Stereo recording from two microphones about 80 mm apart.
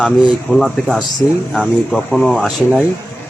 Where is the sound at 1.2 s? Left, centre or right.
Left.